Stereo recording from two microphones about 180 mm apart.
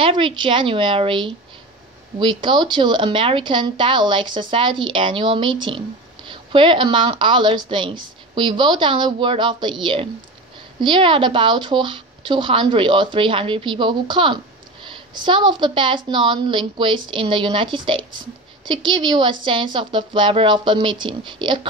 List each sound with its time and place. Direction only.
0.0 s a woman's voice: 30° right (ahead or behind)